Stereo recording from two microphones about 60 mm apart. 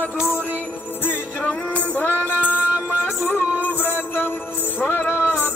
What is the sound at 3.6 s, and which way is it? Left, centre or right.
Music, left.